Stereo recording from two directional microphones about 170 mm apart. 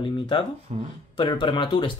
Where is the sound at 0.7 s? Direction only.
40° right (ahead or behind).